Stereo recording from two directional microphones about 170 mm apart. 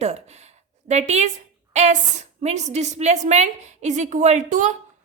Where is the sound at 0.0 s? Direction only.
40° right (ahead or behind).